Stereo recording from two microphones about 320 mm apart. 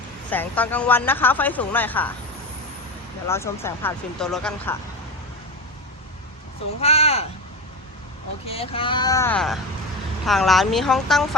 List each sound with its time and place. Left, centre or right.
0.3 s speech: centre
3.2 s speech: centre
6.7 s speech: centre
8.4 s speech: centre